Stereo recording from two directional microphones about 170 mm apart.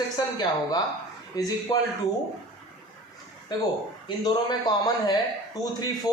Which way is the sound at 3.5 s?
25° left (ahead or behind).